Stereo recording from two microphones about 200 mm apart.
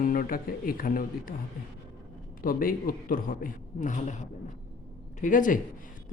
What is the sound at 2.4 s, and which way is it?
A man's voice, 45° left (ahead or behind).